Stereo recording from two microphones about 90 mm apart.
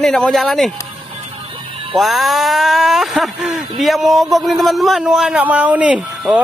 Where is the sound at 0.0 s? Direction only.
5° left (ahead or behind).